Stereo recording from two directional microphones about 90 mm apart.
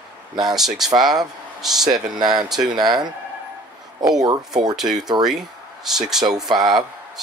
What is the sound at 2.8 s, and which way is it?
Speech, 50° right (ahead or behind).